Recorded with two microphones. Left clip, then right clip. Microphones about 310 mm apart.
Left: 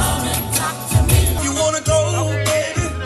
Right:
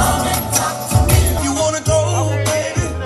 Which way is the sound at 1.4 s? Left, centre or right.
Right.